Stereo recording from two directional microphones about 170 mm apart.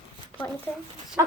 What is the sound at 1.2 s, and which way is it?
Speech, 15° right (ahead or behind).